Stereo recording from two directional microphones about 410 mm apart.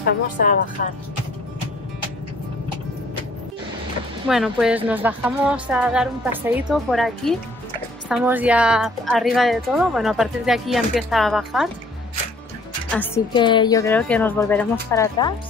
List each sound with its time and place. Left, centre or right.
0.0 s a woman's voice: centre
4.3 s a woman's voice: centre
12.9 s a woman's voice: centre